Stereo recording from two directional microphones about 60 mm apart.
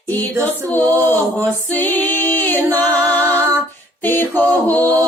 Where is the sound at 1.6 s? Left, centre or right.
Left.